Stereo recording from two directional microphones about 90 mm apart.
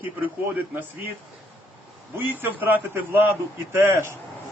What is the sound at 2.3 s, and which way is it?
A man's voice, 20° right (ahead or behind).